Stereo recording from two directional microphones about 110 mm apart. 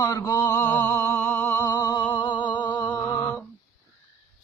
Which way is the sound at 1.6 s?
35° left (ahead or behind).